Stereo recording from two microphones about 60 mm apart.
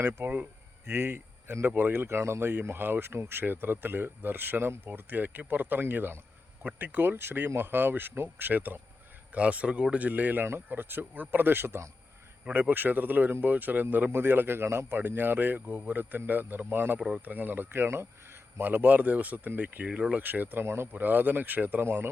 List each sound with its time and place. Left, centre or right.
0.0 s speech: right
9.3 s speech: right
18.6 s speech: right
20.9 s speech: right